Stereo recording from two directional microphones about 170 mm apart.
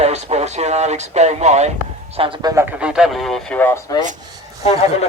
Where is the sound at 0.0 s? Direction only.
40° right (ahead or behind).